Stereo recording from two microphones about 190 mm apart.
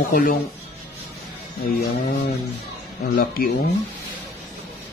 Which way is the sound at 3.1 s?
50° left (ahead or behind).